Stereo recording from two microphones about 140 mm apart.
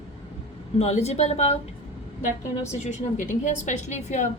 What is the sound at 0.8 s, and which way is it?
Speech, 50° left (ahead or behind).